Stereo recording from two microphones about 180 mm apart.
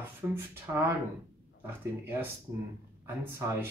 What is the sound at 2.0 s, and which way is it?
Speech, 10° right (ahead or behind).